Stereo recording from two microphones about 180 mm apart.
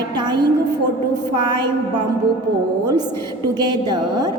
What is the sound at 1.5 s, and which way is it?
Speech, 25° right (ahead or behind).